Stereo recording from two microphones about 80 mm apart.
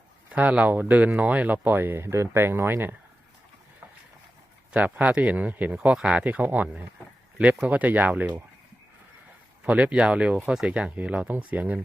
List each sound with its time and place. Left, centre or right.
0.3 s speech: centre
4.7 s speech: centre
9.6 s speech: centre